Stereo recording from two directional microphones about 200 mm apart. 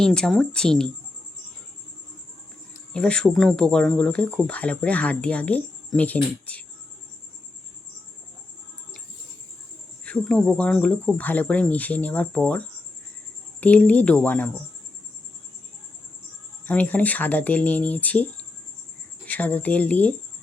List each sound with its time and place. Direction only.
0.0 s speech: 5° left (ahead or behind)
2.9 s speech: 5° left (ahead or behind)
10.1 s speech: 5° left (ahead or behind)
16.6 s speech: 5° left (ahead or behind)